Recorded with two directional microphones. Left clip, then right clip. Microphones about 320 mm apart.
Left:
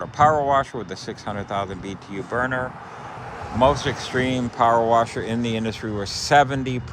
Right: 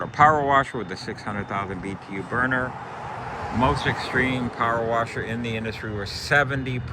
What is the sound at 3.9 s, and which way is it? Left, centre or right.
Speech, left.